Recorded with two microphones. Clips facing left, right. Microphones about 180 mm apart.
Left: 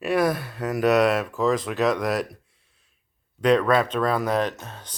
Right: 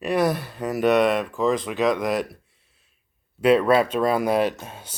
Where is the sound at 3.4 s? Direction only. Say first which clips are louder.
Right 2 dB; 5° right (ahead or behind).